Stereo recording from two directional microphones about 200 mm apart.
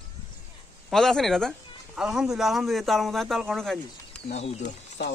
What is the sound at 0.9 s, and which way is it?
Speech, centre (ahead or behind).